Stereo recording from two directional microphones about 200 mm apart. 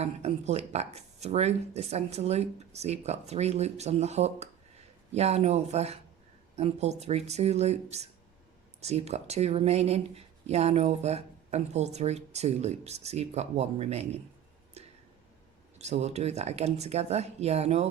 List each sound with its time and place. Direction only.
0.0 s speech: 35° right (ahead or behind)
14.8 s a sound: 35° right (ahead or behind)
15.8 s speech: 35° right (ahead or behind)